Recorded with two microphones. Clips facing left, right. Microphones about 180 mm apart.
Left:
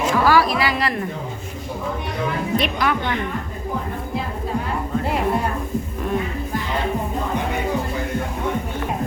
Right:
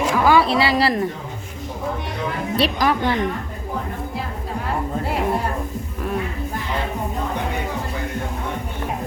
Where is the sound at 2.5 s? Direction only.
35° right (ahead or behind).